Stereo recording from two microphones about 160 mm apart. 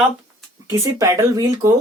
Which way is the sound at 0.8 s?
20° right (ahead or behind).